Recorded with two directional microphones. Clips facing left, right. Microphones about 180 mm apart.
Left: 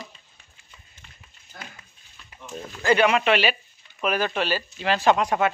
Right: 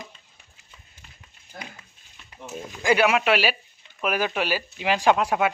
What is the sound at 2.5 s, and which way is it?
Speech, 10° right (ahead or behind).